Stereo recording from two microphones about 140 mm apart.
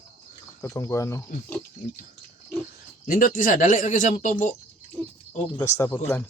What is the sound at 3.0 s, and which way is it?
Speech, 90° left.